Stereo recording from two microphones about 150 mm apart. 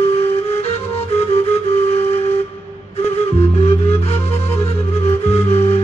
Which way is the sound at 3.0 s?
45° left (ahead or behind).